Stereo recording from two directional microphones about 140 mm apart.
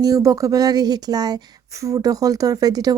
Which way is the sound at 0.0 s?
25° right (ahead or behind).